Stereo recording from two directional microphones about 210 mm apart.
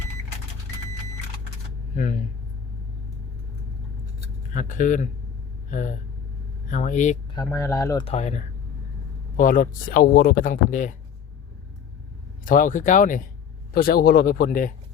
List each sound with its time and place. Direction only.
4.5 s speech: 40° left (ahead or behind)
6.7 s speech: 35° left (ahead or behind)
7.3 s speech: 15° left (ahead or behind)
8.0 s speech: 30° left (ahead or behind)
9.4 s speech: 40° left (ahead or behind)
12.5 s speech: 40° left (ahead or behind)